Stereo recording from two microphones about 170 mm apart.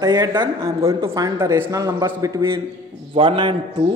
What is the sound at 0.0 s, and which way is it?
Speech, 20° right (ahead or behind).